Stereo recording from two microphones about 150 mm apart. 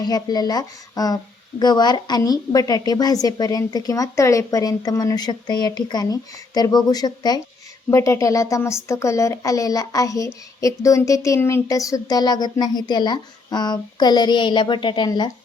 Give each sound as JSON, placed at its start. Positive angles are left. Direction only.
{"t": 0.0, "sound": "a child's voice", "side_deg": 25}